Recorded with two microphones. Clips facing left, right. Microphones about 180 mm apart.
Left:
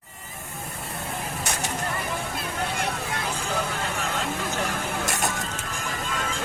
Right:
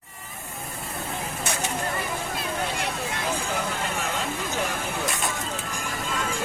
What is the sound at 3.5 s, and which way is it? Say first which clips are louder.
Vehicle: even; 15° right (ahead or behind).